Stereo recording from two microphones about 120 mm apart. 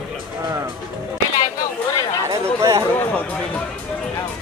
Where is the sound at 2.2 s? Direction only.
25° right (ahead or behind).